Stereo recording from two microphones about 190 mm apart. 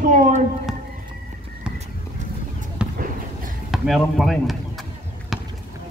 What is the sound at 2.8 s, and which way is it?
Basketball bounce, 5° right (ahead or behind).